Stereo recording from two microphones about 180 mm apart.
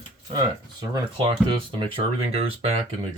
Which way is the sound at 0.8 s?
25° right (ahead or behind).